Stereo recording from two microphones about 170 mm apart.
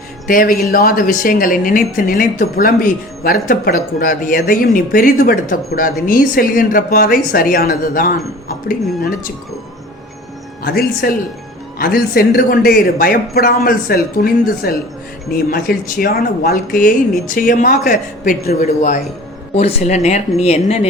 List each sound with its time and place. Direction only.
0.3 s speech: 55° left (ahead or behind)
10.6 s speech: 60° left (ahead or behind); by 20.8 s 40° left (ahead or behind)